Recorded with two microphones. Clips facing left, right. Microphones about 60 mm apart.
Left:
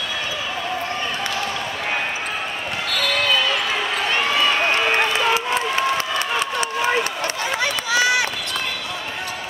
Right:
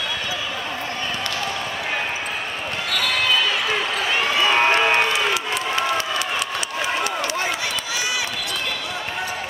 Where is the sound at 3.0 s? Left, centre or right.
Centre.